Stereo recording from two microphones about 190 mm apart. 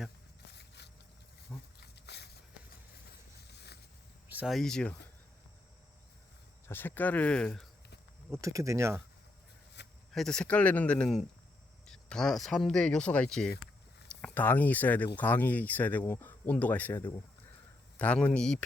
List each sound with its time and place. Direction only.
0.5 s a sound: 60° left (ahead or behind)
3.4 s boat: 60° left (ahead or behind)
4.3 s speech: 5° right (ahead or behind)
6.7 s speech: 10° left (ahead or behind)
8.3 s speech: 15° right (ahead or behind)
10.1 s speech: centre (ahead or behind)